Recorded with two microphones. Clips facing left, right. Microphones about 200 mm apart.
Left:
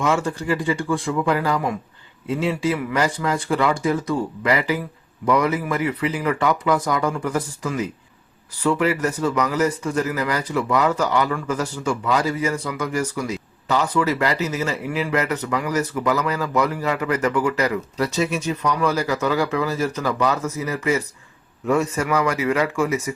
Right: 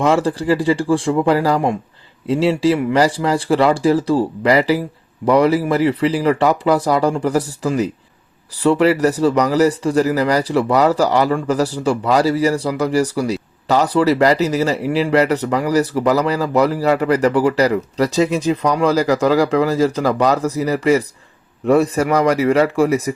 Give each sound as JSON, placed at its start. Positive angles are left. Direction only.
{"t": 0.0, "sound": "a man's voice", "side_deg": -35}